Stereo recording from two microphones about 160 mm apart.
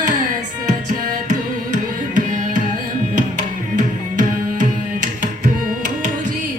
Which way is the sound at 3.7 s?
50° right (ahead or behind).